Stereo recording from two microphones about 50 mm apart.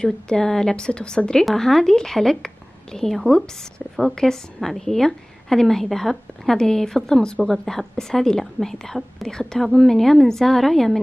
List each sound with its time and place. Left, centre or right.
0.0 s a woman's voice: centre
1.4 s a woman's voice: centre